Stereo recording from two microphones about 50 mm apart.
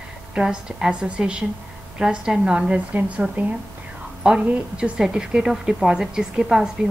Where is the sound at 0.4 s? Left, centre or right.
Centre.